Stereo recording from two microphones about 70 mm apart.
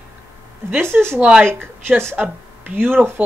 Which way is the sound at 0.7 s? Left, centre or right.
Right.